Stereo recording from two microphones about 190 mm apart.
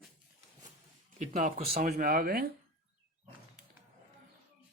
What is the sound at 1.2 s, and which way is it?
Speech, 45° right (ahead or behind).